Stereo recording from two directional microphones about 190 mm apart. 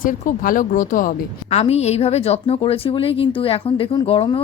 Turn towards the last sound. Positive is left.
turn(degrees=30)  # may be behind; listen again after turning